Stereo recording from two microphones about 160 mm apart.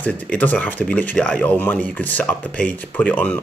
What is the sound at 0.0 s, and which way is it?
Speech, 10° left (ahead or behind).